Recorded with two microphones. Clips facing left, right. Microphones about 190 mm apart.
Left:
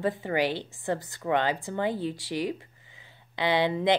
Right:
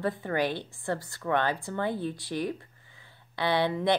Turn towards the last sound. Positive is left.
turn(degrees=20)  # may be behind; listen again after turning